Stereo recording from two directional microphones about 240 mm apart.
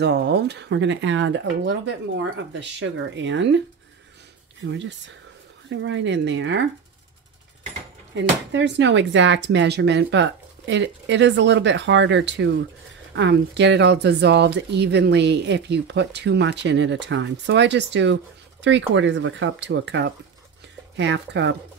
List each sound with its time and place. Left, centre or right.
0.0 s speech: right
8.1 s speech: right